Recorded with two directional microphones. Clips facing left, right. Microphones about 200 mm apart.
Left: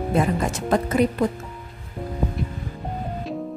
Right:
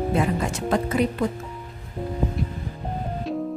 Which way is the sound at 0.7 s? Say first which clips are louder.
Left 2 dB; 45° left (ahead or behind).